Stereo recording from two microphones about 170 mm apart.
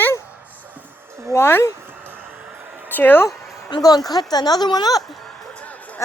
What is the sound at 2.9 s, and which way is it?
Speech, 10° left (ahead or behind).